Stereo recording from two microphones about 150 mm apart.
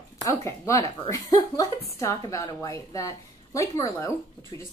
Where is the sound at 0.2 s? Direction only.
20° left (ahead or behind).